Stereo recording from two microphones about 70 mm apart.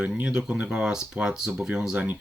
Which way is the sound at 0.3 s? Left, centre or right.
Centre.